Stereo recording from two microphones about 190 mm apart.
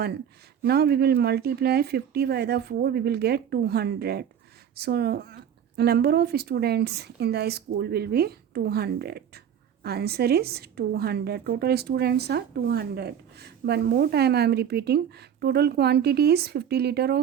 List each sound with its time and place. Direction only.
0.6 s a woman's voice: 55° right (ahead or behind)